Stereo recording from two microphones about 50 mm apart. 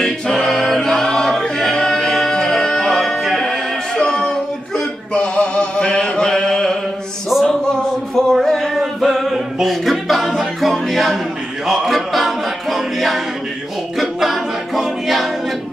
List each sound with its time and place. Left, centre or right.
0.0 s choir: centre
3.9 s singing: centre
4.7 s male singing: centre
7.4 s music: centre
11.6 s a capella: centre